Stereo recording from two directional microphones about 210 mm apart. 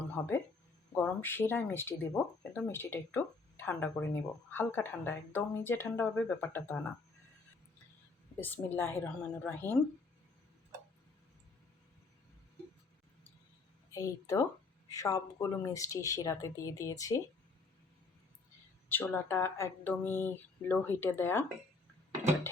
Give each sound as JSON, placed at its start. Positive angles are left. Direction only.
{"t": 0.2, "sound": "speech", "side_deg": 15}
{"t": 8.4, "sound": "speech", "side_deg": 10}
{"t": 13.9, "sound": "speech", "side_deg": 15}
{"t": 18.9, "sound": "speech", "side_deg": 10}